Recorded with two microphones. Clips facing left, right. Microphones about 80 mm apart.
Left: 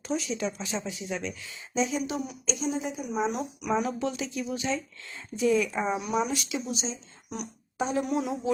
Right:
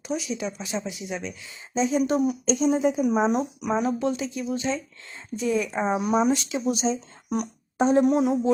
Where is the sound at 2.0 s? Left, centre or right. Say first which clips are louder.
Right 10 dB; right.